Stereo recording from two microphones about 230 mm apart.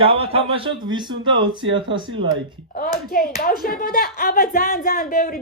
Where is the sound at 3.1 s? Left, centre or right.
Left.